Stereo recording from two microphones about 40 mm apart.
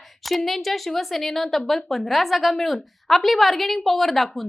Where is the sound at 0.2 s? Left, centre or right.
Centre.